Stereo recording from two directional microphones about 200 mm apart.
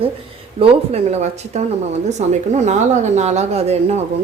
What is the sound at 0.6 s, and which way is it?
Speech, 30° right (ahead or behind).